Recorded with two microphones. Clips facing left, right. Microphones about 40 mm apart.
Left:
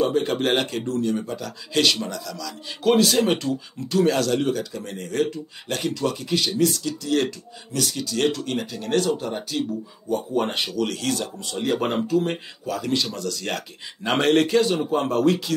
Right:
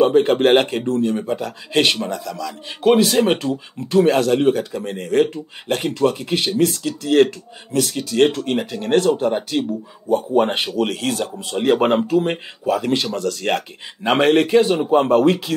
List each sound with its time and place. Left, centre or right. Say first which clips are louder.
0.0 s speech: right 7 dB; right